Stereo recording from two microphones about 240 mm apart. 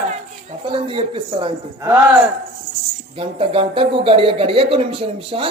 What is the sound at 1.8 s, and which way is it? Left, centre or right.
Speech, centre.